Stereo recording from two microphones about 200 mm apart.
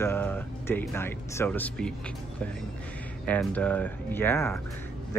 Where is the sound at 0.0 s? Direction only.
10° left (ahead or behind).